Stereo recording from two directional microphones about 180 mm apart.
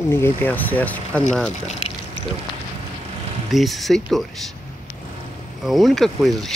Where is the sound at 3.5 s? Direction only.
Centre (ahead or behind).